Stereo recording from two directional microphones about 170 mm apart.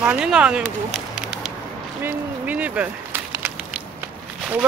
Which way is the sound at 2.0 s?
10° right (ahead or behind).